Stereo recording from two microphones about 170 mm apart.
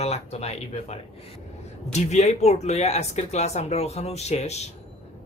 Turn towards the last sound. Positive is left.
turn(degrees=40)  # may be behind; listen again after turning